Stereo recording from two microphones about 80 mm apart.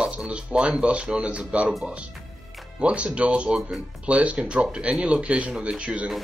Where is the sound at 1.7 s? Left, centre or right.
Centre.